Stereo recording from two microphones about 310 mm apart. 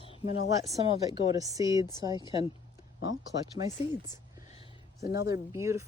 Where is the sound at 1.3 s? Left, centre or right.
Centre.